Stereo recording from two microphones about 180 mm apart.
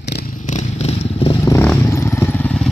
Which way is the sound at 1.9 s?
10° left (ahead or behind).